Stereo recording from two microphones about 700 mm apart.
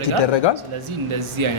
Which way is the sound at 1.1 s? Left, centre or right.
Right.